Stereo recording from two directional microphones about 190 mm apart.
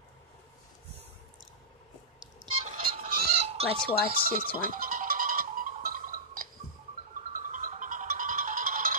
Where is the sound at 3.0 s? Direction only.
35° right (ahead or behind).